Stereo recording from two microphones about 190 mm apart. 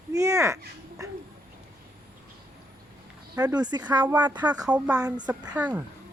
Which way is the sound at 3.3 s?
20° right (ahead or behind).